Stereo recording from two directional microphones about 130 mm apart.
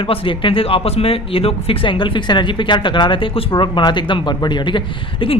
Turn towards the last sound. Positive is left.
turn(degrees=40)  # may be behind; listen again after turning